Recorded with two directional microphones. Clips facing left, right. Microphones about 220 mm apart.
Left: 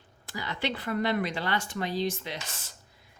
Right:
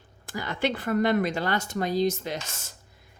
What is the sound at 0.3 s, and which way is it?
Speech, 50° right (ahead or behind).